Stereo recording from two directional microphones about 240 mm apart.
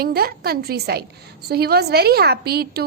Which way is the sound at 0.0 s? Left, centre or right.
Right.